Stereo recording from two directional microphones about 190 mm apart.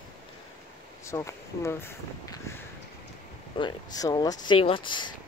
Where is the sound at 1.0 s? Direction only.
15° left (ahead or behind).